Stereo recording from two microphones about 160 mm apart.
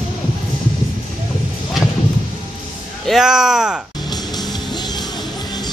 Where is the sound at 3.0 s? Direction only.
Centre (ahead or behind).